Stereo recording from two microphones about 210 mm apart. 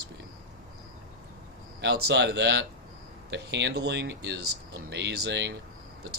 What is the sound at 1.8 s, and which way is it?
Speech, 50° right (ahead or behind).